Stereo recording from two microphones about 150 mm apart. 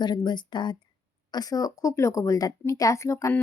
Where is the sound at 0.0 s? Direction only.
30° left (ahead or behind).